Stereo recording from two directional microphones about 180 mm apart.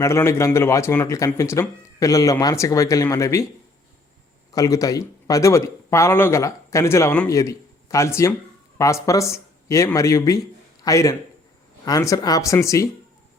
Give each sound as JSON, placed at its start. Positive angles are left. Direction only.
{"t": 0.0, "sound": "speech", "side_deg": 15}
{"t": 4.5, "sound": "speech", "side_deg": 20}